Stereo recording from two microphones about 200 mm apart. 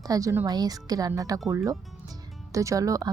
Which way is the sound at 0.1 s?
15° right (ahead or behind).